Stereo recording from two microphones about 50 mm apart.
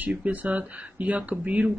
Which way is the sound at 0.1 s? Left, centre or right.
Right.